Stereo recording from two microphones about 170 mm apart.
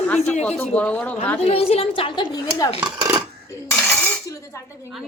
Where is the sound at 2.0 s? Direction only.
30° left (ahead or behind).